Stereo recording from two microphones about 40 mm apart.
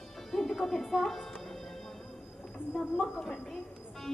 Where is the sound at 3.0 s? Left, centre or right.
Centre.